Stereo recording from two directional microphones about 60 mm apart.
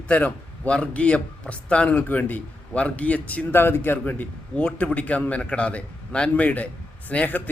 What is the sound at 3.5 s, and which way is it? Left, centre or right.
A man's voice, left.